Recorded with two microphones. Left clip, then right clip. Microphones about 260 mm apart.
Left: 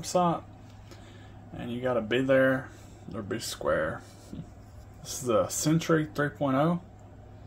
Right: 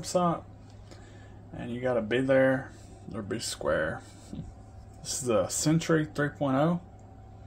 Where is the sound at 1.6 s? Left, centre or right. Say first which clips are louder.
Even; centre.